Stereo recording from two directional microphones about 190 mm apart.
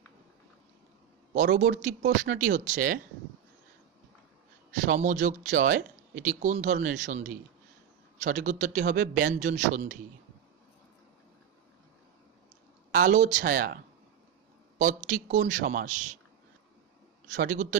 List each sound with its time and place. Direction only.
1.3 s speech: 45° right (ahead or behind)
4.8 s speech: 40° right (ahead or behind)
12.9 s speech: 40° right (ahead or behind)
14.8 s speech: 40° right (ahead or behind)
17.3 s speech: 45° right (ahead or behind)